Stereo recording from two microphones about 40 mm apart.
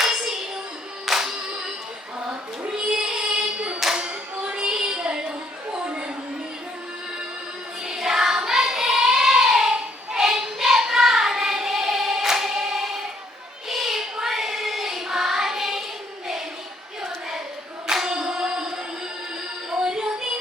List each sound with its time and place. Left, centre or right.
0.0 s hands: centre
1.0 s music: centre
2.2 s child singing: right
3.9 s hands: centre
5.7 s a sound: right
7.9 s child singing: centre
17.8 s a sound: centre
19.7 s music: centre